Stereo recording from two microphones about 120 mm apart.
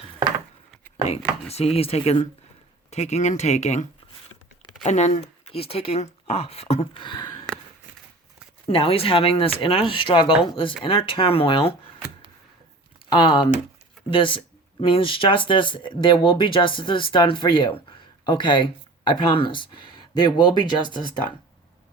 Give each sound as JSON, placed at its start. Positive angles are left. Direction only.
{"t": 1.5, "sound": "speech", "side_deg": 60}
{"t": 2.9, "sound": "speech", "side_deg": 65}
{"t": 5.5, "sound": "speech", "side_deg": 55}
{"t": 7.0, "sound": "speech", "side_deg": 40}
{"t": 7.5, "sound": "a sound", "side_deg": 5}
{"t": 8.7, "sound": "speech", "side_deg": 50}
{"t": 13.1, "sound": "speech", "side_deg": 40}